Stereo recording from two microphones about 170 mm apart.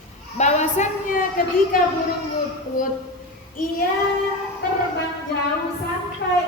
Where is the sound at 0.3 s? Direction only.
40° left (ahead or behind).